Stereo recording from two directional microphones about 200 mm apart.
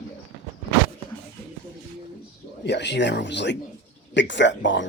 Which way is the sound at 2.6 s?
60° left (ahead or behind).